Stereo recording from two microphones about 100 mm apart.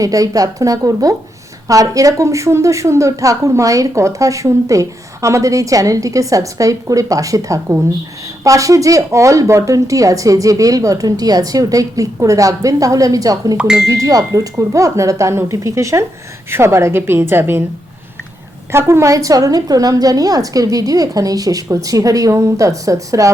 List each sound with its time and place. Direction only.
0.0 s a woman's voice: 35° right (ahead or behind)
13.6 s speech: 10° right (ahead or behind)
14.0 s a woman's voice: 35° right (ahead or behind)
18.7 s a woman's voice: 25° right (ahead or behind)